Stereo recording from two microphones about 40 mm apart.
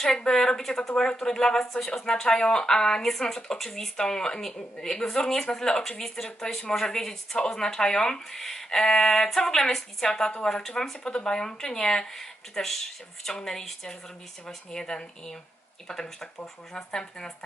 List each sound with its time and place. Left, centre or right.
0.0 s speech: centre
10.9 s speech: left